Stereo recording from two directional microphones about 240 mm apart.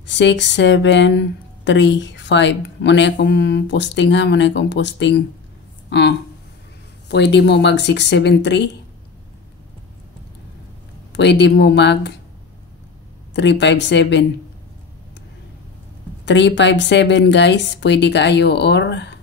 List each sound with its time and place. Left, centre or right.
0.0 s speech: left
11.1 s speech: left
13.3 s speech: left
16.3 s speech: left